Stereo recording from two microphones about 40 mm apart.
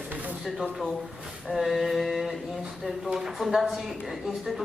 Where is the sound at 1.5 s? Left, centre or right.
Centre.